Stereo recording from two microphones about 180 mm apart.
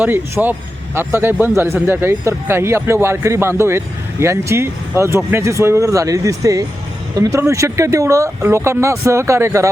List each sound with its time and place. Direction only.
0.0 s speech: 10° right (ahead or behind)